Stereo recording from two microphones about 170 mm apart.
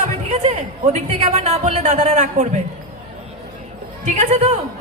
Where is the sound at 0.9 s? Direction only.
40° right (ahead or behind).